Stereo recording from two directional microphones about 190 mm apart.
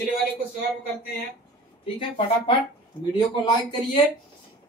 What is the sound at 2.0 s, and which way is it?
Speech, 30° left (ahead or behind).